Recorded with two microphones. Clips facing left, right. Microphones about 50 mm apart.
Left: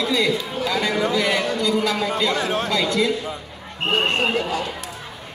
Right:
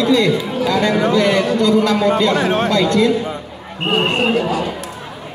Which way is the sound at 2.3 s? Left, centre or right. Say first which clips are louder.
Right 7 dB; right.